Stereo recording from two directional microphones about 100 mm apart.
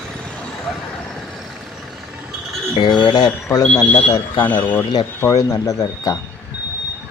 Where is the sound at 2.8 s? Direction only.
50° left (ahead or behind).